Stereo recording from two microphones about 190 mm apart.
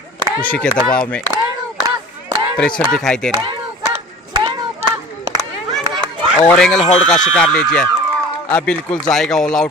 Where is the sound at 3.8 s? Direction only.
25° right (ahead or behind).